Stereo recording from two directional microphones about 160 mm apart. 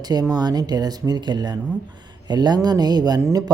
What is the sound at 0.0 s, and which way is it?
A man's voice, 25° right (ahead or behind).